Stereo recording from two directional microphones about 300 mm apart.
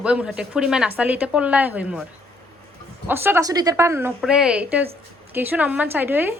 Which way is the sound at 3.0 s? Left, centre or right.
Centre.